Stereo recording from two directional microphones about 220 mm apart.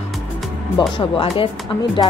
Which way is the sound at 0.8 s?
25° left (ahead or behind).